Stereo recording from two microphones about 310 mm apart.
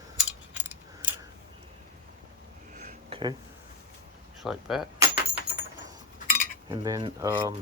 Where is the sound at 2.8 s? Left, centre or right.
Centre.